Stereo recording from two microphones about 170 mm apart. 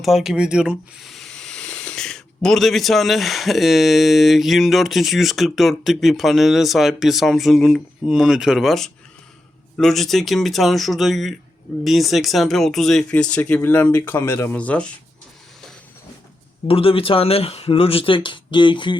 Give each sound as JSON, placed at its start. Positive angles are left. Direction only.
{"t": 0.0, "sound": "speech", "side_deg": 0}
{"t": 16.6, "sound": "speech", "side_deg": 35}